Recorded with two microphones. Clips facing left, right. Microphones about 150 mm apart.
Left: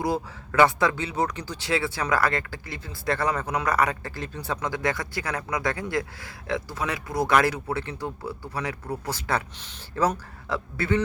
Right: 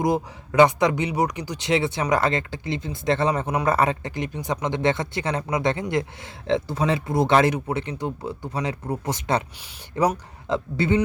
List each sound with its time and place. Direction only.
0.0 s speech: 20° right (ahead or behind)